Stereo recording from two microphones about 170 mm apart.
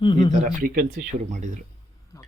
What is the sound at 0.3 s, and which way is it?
Speech, 45° right (ahead or behind).